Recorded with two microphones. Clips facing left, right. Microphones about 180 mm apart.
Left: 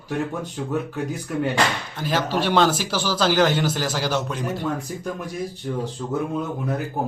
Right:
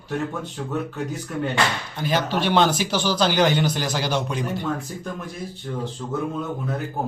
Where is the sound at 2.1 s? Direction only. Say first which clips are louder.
Even; 5° left (ahead or behind).